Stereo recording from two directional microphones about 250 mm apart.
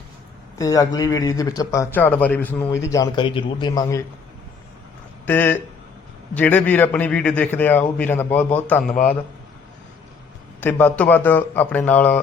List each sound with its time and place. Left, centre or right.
0.6 s a man's voice: centre
5.2 s a man's voice: centre
10.6 s a man's voice: centre